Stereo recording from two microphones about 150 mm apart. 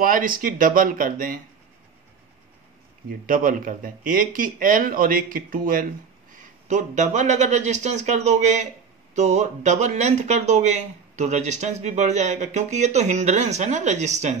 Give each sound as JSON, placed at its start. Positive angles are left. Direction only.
{"t": 0.0, "sound": "speech", "side_deg": -65}
{"t": 3.1, "sound": "speech", "side_deg": -65}
{"t": 6.3, "sound": "speech", "side_deg": -55}